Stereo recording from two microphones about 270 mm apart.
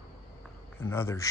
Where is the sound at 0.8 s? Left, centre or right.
Centre.